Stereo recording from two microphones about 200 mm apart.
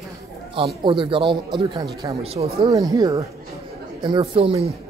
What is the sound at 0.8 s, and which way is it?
Speech, 25° right (ahead or behind).